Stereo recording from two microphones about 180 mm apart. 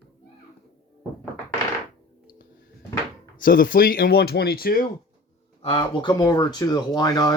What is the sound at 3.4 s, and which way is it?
Speech, 50° left (ahead or behind).